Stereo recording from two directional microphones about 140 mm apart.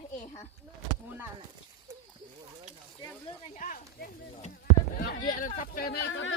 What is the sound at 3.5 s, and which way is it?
Speech, 70° left (ahead or behind).